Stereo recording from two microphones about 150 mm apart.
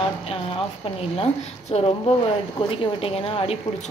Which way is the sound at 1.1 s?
40° left (ahead or behind).